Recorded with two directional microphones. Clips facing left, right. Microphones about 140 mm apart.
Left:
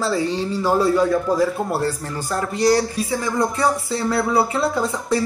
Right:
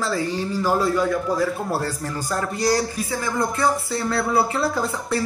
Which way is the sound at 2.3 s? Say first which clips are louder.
Left 4 dB; 20° left (ahead or behind).